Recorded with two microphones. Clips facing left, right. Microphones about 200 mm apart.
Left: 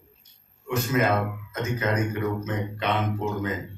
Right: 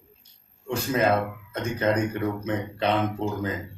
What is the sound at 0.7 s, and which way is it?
Speech, 30° right (ahead or behind).